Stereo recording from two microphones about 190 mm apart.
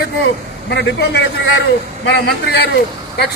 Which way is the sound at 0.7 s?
65° left (ahead or behind).